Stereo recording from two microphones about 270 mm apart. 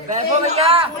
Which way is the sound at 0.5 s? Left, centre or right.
Right.